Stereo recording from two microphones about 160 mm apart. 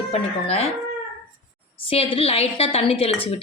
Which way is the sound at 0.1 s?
40° left (ahead or behind).